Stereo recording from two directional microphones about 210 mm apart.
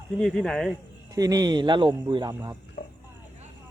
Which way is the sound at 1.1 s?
15° right (ahead or behind).